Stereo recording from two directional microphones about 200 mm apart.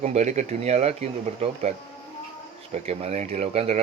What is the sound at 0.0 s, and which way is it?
Speech, 35° right (ahead or behind).